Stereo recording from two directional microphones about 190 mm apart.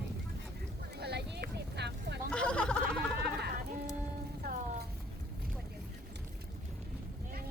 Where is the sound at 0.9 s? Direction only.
60° right (ahead or behind).